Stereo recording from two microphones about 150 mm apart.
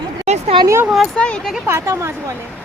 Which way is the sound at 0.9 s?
5° left (ahead or behind).